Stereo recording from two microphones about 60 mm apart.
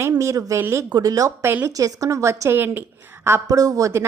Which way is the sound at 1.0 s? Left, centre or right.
Right.